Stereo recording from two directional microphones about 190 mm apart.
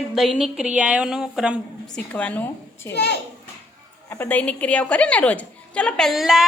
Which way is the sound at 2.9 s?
60° left (ahead or behind).